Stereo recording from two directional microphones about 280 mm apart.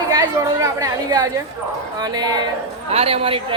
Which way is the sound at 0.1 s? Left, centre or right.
Centre.